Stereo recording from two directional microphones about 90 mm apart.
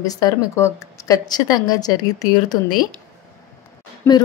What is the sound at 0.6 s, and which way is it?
Speech, 35° left (ahead or behind).